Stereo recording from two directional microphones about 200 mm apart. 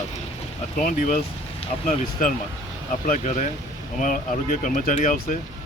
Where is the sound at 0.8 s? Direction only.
40° left (ahead or behind).